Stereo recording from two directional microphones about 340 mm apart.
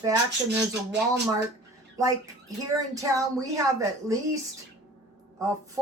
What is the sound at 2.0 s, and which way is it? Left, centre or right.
Speech, centre.